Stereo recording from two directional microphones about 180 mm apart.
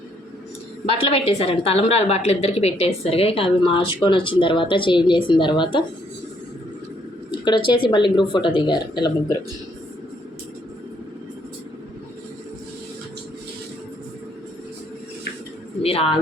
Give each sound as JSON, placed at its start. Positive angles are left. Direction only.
{"t": 0.9, "sound": "a woman's voice", "side_deg": 35}
{"t": 7.3, "sound": "speech", "side_deg": 25}
{"t": 15.8, "sound": "speech", "side_deg": 30}